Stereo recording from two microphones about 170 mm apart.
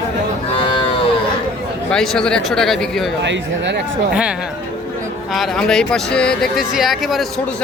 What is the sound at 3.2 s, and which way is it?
Speech, 90° right.